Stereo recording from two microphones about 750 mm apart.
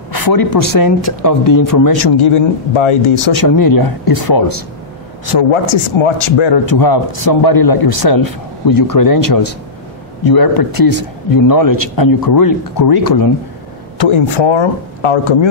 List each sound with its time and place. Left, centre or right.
0.1 s a man's voice: left
3.3 s a man's voice: left
13.9 s speech: left